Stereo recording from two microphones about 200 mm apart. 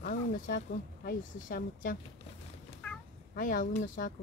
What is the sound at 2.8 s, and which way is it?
Cat, 5° left (ahead or behind).